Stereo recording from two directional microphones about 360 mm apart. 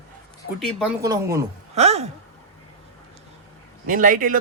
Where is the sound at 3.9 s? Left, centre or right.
Right.